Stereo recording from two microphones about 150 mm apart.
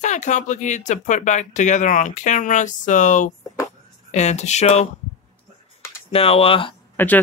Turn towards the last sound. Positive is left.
turn(degrees=10)  # may be behind; listen again after turning